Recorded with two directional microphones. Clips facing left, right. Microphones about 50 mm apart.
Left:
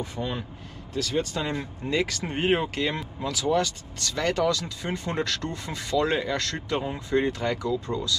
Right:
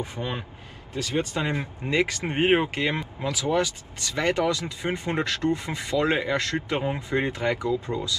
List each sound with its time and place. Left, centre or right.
0.0 s speech: right